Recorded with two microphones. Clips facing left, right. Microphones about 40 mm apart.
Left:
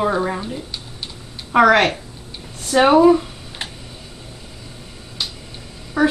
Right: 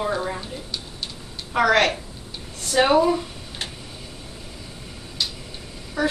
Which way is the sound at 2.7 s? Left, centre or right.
Centre.